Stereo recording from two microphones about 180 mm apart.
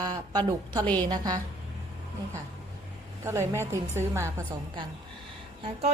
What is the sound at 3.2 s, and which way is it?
A woman's voice, 15° right (ahead or behind).